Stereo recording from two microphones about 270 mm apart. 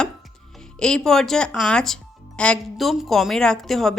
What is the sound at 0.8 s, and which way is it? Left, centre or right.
A woman's voice, centre.